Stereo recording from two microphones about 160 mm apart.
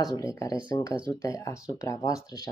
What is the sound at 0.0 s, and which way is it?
Speech, 20° left (ahead or behind).